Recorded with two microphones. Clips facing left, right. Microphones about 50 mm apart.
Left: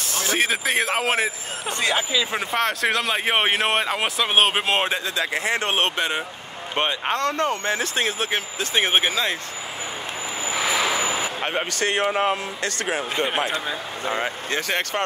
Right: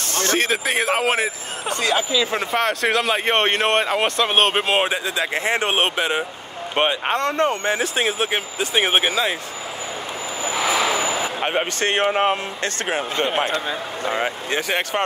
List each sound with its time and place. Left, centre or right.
0.0 s speech: centre
1.7 s speech: left
2.1 s speech: centre
5.3 s speech: right
5.9 s speech: centre
6.7 s speech: centre
10.5 s vehicle: centre
11.8 s speech: right
14.2 s speech: centre